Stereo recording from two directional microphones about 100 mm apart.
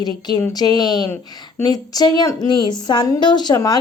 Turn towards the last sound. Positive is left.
turn(degrees=40)  # may be behind; listen again after turning